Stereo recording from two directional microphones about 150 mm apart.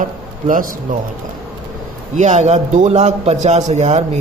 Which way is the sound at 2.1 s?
50° right (ahead or behind).